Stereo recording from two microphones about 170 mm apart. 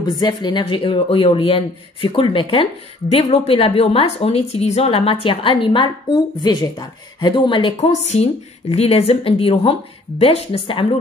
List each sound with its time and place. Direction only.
0.2 s speech: 25° left (ahead or behind)